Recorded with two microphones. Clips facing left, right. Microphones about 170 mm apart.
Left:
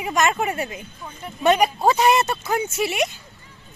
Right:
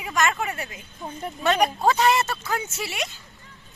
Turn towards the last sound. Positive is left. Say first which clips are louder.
# left 8 dB
turn(degrees=20)  # may be behind; listen again after turning